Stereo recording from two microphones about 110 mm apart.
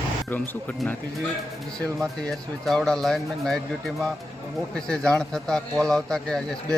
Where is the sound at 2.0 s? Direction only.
5° left (ahead or behind).